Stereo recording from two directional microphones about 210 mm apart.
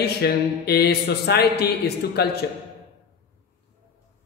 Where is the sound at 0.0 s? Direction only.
50° left (ahead or behind).